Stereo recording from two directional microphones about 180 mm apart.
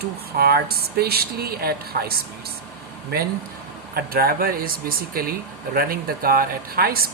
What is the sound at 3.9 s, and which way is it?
Speech, 55° right (ahead or behind).